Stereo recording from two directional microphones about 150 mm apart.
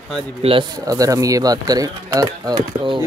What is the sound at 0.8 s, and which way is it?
Speech, 25° right (ahead or behind).